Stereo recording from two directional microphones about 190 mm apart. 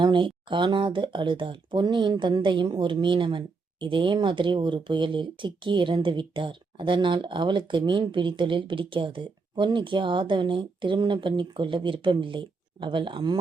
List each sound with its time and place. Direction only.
0.0 s speech: 25° right (ahead or behind)